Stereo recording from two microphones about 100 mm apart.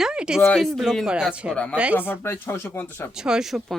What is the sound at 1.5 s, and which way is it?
Speech, 10° left (ahead or behind).